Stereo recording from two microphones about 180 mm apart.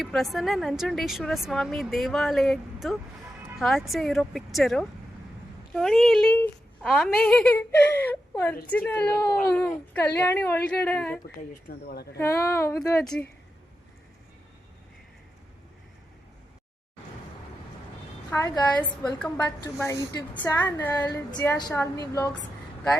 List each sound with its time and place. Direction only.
0.0 s speech: centre (ahead or behind)
3.6 s speech: centre (ahead or behind)
11.2 s speech: 50° left (ahead or behind)
12.2 s speech: 15° left (ahead or behind)
13.0 s speech: 5° left (ahead or behind)
18.3 s a woman's voice: 15° left (ahead or behind)